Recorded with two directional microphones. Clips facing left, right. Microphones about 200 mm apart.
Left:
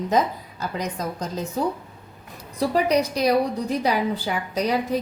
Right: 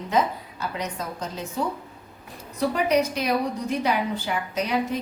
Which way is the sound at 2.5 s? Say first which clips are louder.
Left 1 dB; 35° left (ahead or behind).